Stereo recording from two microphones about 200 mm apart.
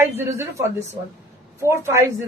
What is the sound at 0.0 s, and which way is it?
A woman's voice, 10° right (ahead or behind).